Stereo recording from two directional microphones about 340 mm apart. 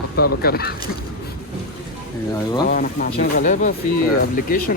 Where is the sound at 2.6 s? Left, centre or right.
Left.